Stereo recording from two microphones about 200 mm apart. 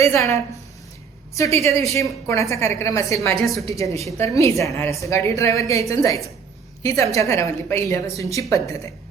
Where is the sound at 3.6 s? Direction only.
15° left (ahead or behind).